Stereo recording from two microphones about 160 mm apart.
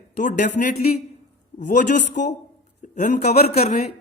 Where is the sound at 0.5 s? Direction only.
55° left (ahead or behind).